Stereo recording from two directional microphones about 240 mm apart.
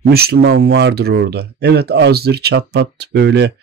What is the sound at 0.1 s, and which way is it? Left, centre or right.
Speech, right.